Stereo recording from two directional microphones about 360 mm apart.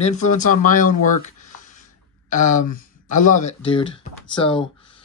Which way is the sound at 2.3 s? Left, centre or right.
Left.